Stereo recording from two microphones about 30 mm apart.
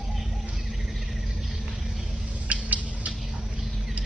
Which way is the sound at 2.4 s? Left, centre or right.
Right.